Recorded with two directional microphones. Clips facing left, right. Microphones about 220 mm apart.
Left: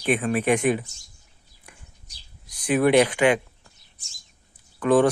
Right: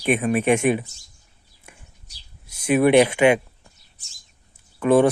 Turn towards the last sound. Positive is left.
turn(degrees=-20)  # may be behind; listen again after turning